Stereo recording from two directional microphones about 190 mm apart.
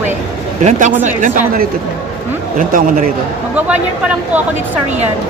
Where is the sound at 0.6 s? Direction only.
40° right (ahead or behind).